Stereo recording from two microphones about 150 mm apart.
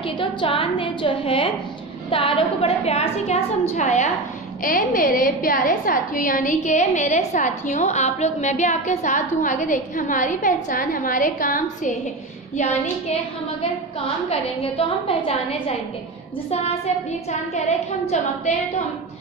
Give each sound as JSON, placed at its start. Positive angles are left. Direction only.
{"t": 0.0, "sound": "a woman's voice", "side_deg": 35}
{"t": 3.7, "sound": "a woman's voice", "side_deg": 50}
{"t": 4.6, "sound": "a woman's voice", "side_deg": 70}
{"t": 14.3, "sound": "a woman's voice", "side_deg": 40}
{"t": 16.4, "sound": "a woman's voice", "side_deg": 45}